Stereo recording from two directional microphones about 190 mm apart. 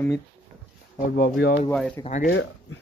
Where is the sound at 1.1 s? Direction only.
55° left (ahead or behind).